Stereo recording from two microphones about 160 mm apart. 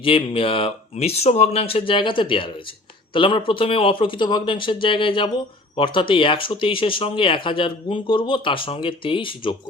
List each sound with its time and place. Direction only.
0.0 s speech: 35° left (ahead or behind)